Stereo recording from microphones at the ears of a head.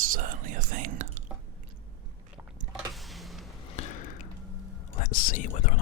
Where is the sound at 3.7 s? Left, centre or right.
Left.